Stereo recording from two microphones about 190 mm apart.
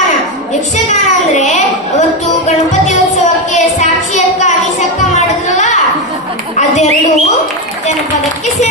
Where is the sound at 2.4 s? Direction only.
40° left (ahead or behind).